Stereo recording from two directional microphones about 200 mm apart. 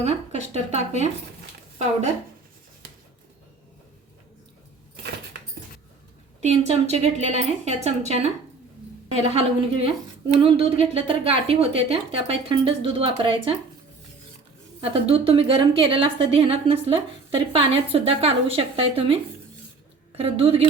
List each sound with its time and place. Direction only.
0.0 s speech: 35° right (ahead or behind)
6.4 s a woman's voice: 35° right (ahead or behind)
9.2 s a woman's voice: 30° right (ahead or behind)
14.8 s a woman's voice: 30° right (ahead or behind)